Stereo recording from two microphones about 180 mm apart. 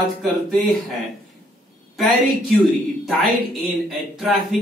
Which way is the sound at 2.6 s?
Centre (ahead or behind).